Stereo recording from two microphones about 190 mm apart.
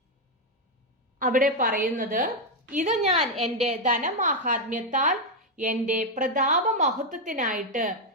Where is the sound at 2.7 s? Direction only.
35° right (ahead or behind).